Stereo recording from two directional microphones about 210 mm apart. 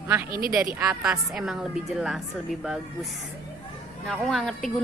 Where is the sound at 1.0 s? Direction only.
Centre (ahead or behind).